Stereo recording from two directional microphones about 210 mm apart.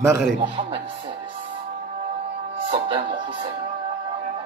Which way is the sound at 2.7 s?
25° right (ahead or behind).